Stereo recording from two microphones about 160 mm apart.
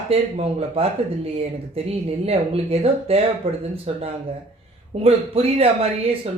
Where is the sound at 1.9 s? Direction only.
40° right (ahead or behind).